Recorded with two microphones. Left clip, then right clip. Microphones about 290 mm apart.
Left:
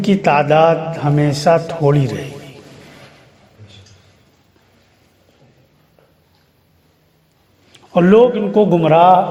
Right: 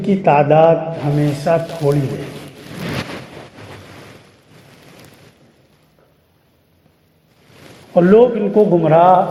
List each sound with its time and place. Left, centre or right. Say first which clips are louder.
0.0 s a man's voice: right 1 dB; left
7.9 s a man's voice: even; left